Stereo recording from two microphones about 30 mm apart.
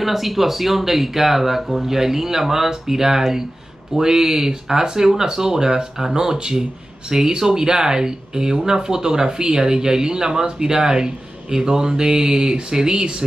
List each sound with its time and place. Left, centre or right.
0.0 s speech: centre
1.9 s speech: centre